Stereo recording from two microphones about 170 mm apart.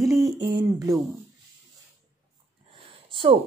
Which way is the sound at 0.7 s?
20° right (ahead or behind).